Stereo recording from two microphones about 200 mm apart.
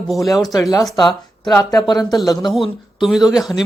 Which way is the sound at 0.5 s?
15° left (ahead or behind).